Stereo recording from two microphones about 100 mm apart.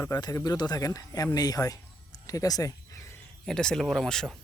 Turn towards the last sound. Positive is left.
turn(degrees=5)  # may be behind; listen again after turning